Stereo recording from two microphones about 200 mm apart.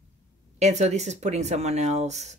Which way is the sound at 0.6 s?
35° right (ahead or behind).